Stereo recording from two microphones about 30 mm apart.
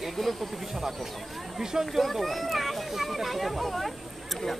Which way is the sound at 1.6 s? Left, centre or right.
Centre.